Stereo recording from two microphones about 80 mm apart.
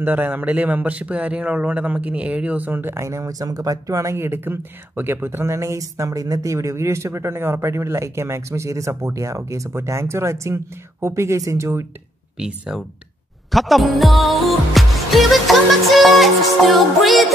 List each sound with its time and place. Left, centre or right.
0.0 s speech: right
12.4 s speech: centre
13.5 s music: centre